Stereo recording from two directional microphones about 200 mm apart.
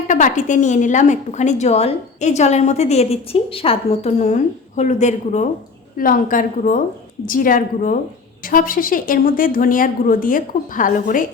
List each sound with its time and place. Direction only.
0.1 s a woman's voice: 40° left (ahead or behind)